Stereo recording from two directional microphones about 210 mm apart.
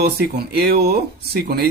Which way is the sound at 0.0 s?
50° right (ahead or behind).